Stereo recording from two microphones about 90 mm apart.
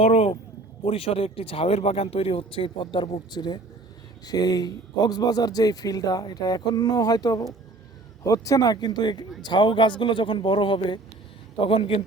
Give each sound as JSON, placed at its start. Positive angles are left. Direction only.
{"t": 0.8, "sound": "a man's voice", "side_deg": 90}
{"t": 11.5, "sound": "a man's voice", "side_deg": 85}